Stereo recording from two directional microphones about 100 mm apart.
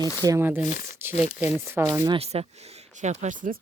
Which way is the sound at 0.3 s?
25° right (ahead or behind).